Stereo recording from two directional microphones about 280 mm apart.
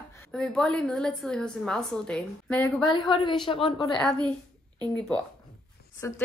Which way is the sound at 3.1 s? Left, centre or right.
Centre.